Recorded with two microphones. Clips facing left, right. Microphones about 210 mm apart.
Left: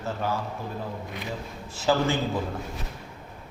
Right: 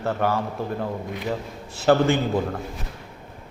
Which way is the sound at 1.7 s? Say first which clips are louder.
Right 6 dB; 60° right (ahead or behind).